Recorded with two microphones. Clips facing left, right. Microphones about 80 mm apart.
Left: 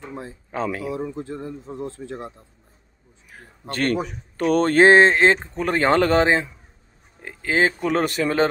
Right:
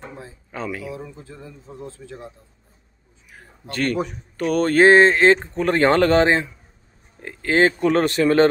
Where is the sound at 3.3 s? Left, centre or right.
Left.